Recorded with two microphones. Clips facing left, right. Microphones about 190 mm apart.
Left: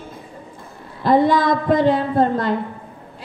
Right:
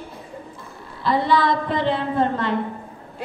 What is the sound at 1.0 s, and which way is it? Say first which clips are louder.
A man's voice: left 4 dB; 45° left (ahead or behind).